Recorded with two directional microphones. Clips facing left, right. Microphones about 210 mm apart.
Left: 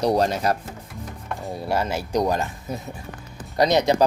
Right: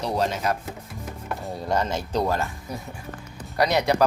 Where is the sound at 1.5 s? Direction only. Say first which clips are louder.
Left 1 dB; 10° left (ahead or behind).